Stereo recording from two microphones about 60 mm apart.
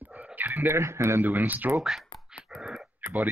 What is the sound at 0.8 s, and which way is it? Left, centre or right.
Speech, right.